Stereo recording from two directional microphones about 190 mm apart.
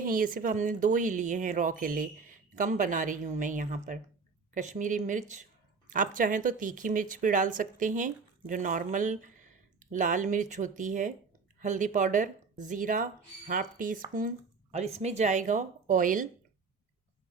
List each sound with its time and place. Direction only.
0.0 s speech: 45° right (ahead or behind)